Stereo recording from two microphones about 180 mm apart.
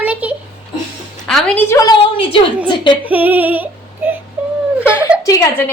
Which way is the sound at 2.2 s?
30° left (ahead or behind).